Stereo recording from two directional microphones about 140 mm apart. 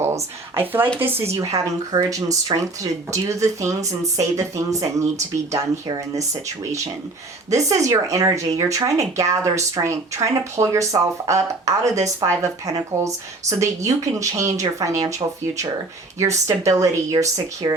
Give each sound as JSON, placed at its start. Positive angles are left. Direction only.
{"t": 0.6, "sound": "speech", "side_deg": -15}
{"t": 7.5, "sound": "speech", "side_deg": -20}
{"t": 16.2, "sound": "speech", "side_deg": -20}